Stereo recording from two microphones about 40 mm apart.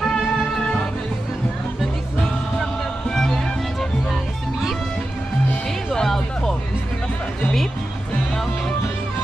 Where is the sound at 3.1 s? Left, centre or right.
Centre.